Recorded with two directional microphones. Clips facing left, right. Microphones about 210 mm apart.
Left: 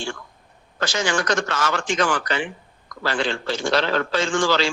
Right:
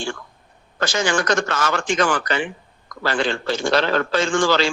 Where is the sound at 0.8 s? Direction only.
50° right (ahead or behind).